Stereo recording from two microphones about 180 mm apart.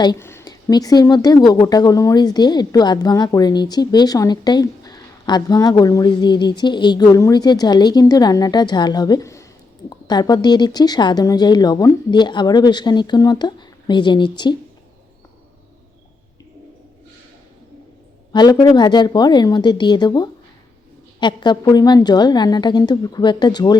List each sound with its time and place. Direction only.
0.0 s speech: 20° left (ahead or behind)
18.3 s speech: 25° left (ahead or behind)